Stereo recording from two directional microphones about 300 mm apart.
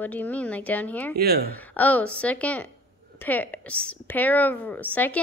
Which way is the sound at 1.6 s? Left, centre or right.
Centre.